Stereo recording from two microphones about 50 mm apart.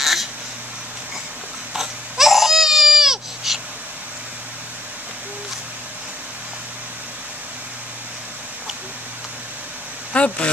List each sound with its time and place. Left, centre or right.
0.0 s crow: centre
1.8 s crying: centre
10.1 s speech: left